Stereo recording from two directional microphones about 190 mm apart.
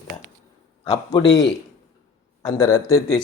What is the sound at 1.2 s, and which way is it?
Speech, 70° left (ahead or behind).